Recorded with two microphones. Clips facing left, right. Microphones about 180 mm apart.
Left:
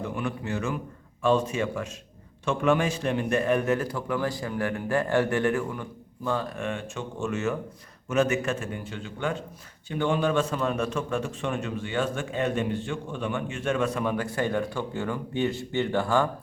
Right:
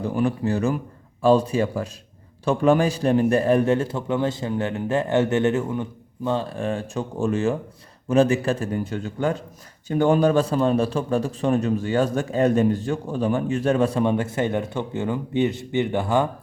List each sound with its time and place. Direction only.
0.0 s a man's voice: 35° right (ahead or behind); by 16.3 s 20° right (ahead or behind)